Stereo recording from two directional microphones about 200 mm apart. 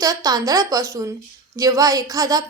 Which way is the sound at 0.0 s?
20° right (ahead or behind).